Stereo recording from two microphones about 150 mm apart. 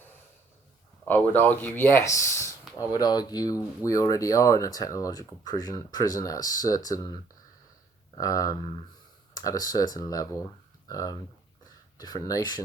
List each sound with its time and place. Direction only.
1.0 s speech: 10° left (ahead or behind)
8.2 s speech: 25° left (ahead or behind)